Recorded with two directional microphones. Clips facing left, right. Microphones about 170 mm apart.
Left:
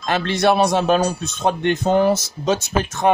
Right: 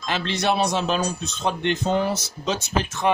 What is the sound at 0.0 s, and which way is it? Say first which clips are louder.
Speech: left 6 dB; 55° left (ahead or behind).